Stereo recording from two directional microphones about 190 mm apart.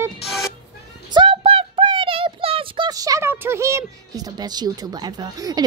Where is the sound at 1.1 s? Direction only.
25° right (ahead or behind).